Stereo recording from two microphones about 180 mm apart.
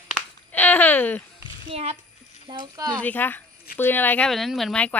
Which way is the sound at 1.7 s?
35° right (ahead or behind).